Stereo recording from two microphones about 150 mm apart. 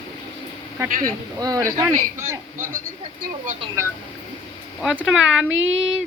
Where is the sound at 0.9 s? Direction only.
65° right (ahead or behind).